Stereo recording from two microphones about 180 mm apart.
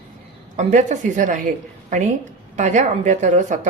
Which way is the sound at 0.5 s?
45° right (ahead or behind).